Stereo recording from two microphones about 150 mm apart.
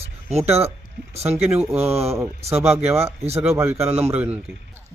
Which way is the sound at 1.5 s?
15° right (ahead or behind).